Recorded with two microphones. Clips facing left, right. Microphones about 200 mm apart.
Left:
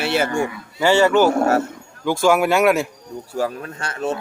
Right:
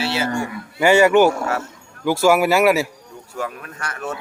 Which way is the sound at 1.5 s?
55° left (ahead or behind).